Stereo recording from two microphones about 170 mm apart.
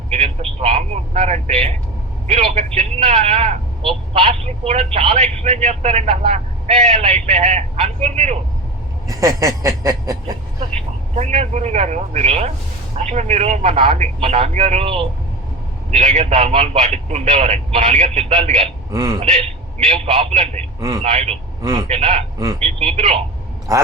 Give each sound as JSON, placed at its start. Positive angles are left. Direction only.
{"t": 0.1, "sound": "a man's voice", "side_deg": -35}
{"t": 9.0, "sound": "speech", "side_deg": -20}
{"t": 11.1, "sound": "a man's voice", "side_deg": -40}
{"t": 18.9, "sound": "speech", "side_deg": -20}
{"t": 19.9, "sound": "a man's voice", "side_deg": -35}
{"t": 21.6, "sound": "speech", "side_deg": -20}
{"t": 21.8, "sound": "a man's voice", "side_deg": -35}